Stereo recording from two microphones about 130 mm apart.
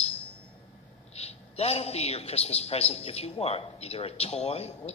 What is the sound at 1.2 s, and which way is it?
Speech, 50° left (ahead or behind).